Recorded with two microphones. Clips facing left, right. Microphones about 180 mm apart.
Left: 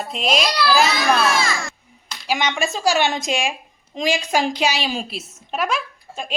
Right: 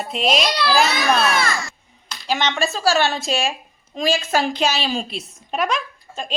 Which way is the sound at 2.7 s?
15° left (ahead or behind).